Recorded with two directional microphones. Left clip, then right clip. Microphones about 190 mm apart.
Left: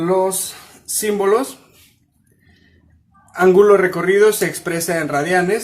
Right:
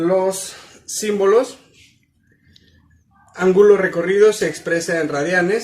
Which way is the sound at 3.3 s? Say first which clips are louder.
Left 1 dB; 55° left (ahead or behind).